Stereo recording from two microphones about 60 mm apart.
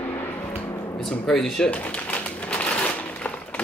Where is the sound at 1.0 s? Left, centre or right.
Centre.